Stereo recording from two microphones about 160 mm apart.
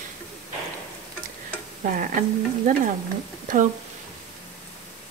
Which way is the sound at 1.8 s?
55° right (ahead or behind).